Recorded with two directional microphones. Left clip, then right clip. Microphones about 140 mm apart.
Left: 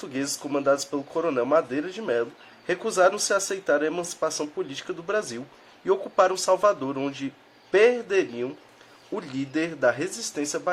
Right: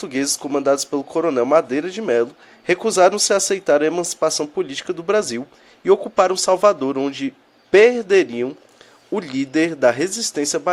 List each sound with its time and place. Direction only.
0.0 s a man's voice: 40° right (ahead or behind)